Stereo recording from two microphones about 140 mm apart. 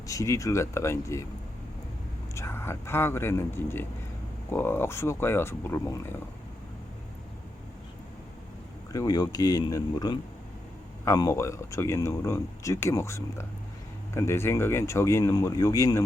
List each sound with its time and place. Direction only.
0.1 s speech: 25° left (ahead or behind)
2.3 s speech: 20° left (ahead or behind)
8.9 s speech: 25° left (ahead or behind)